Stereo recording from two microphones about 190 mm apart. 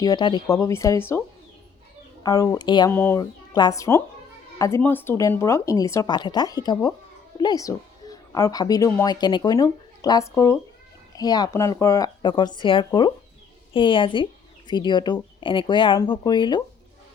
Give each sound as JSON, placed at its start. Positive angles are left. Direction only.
{"t": 0.0, "sound": "speech", "side_deg": 20}
{"t": 2.2, "sound": "speech", "side_deg": 20}
{"t": 2.9, "sound": "a woman's voice", "side_deg": 10}